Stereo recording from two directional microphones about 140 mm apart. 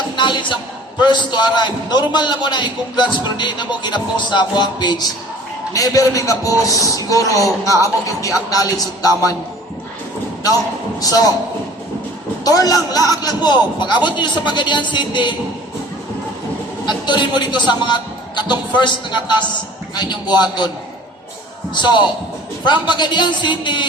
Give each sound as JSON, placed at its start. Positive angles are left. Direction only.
{"t": 0.2, "sound": "a man's voice", "side_deg": 35}
{"t": 11.0, "sound": "a man's voice", "side_deg": 25}
{"t": 12.5, "sound": "a man's voice", "side_deg": 25}
{"t": 16.8, "sound": "a man's voice", "side_deg": 35}
{"t": 20.0, "sound": "a man's voice", "side_deg": 30}
{"t": 21.8, "sound": "a man's voice", "side_deg": 30}